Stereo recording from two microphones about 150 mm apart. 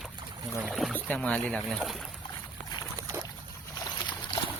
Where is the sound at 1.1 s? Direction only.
10° left (ahead or behind).